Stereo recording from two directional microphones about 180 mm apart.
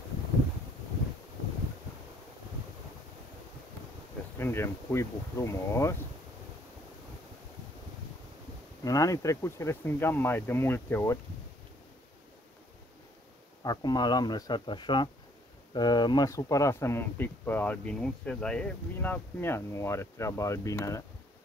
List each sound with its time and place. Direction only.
4.4 s speech: 15° left (ahead or behind)
8.8 s speech: 20° left (ahead or behind)
13.7 s speech: 20° left (ahead or behind)